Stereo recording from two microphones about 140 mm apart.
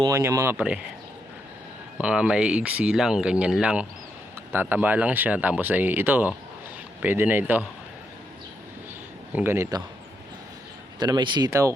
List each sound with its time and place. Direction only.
0.1 s speech: 20° right (ahead or behind)
2.0 s speech: 5° right (ahead or behind)
9.3 s a man's voice: 15° right (ahead or behind)
11.0 s speech: 35° right (ahead or behind)